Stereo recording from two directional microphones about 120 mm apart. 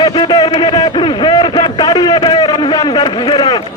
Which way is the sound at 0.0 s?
40° left (ahead or behind).